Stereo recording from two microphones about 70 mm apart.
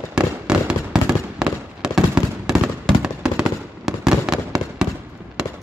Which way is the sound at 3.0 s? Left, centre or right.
Centre.